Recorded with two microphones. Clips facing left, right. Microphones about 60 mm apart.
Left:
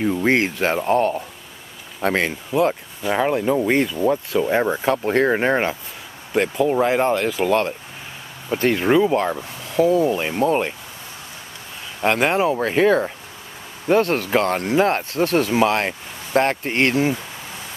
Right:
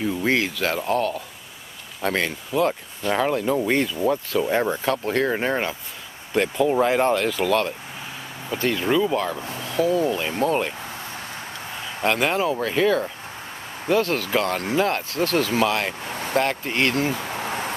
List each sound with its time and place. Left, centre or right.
0.0 s speech: left
2.5 s speech: centre; by 5.8 s left
6.3 s speech: centre
8.5 s speech: left
10.1 s speech: left
12.0 s speech: left
12.4 s speech: left
17.1 s a sound: right